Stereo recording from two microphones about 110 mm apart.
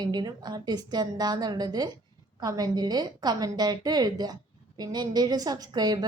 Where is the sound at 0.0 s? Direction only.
40° right (ahead or behind).